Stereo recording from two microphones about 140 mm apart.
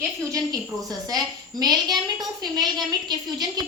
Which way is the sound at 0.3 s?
25° right (ahead or behind).